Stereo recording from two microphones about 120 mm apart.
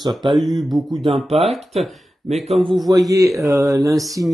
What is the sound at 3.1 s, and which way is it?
Speech, 25° right (ahead or behind).